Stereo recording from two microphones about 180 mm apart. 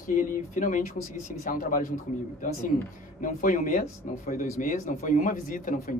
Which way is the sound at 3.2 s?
45° left (ahead or behind).